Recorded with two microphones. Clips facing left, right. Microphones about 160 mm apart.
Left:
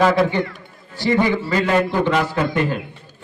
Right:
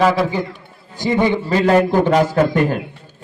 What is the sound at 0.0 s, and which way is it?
Speech, 5° right (ahead or behind).